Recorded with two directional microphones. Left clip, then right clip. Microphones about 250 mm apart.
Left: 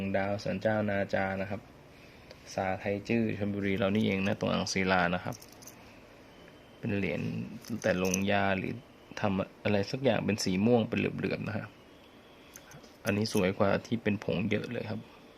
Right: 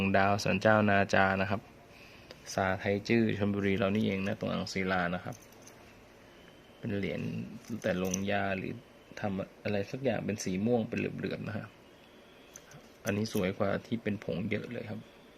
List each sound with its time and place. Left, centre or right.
0.1 s speech: right
2.6 s speech: centre
6.8 s speech: centre
13.1 s speech: centre